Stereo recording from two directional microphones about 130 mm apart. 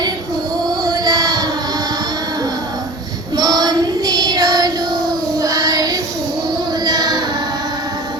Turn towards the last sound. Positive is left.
turn(degrees=-30)  # may be behind; listen again after turning